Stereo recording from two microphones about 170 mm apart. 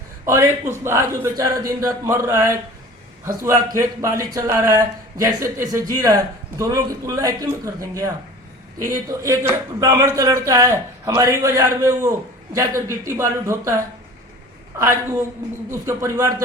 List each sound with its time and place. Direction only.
0.3 s a man's voice: 15° right (ahead or behind)
14.8 s speech: 15° right (ahead or behind)